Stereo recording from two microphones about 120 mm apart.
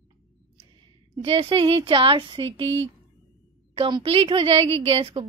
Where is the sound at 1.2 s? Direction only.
50° right (ahead or behind).